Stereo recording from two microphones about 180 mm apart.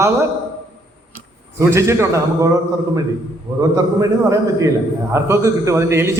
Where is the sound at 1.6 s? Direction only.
15° right (ahead or behind).